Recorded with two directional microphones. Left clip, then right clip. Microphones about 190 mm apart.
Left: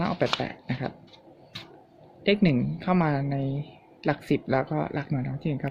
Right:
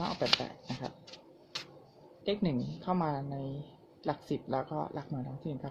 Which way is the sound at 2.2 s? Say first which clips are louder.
Left 10 dB; 35° left (ahead or behind).